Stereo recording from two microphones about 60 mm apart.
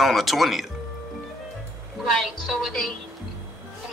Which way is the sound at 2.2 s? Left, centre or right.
Centre.